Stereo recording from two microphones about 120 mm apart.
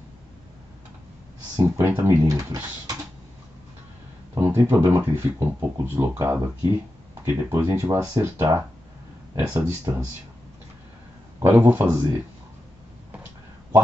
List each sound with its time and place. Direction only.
1.6 s speech: 20° right (ahead or behind)
4.4 s speech: 20° right (ahead or behind)
11.4 s speech: 15° right (ahead or behind)